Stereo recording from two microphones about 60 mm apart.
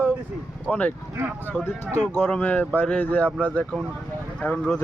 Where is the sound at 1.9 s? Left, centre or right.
Left.